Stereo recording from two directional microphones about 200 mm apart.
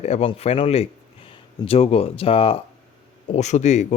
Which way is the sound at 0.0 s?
30° left (ahead or behind).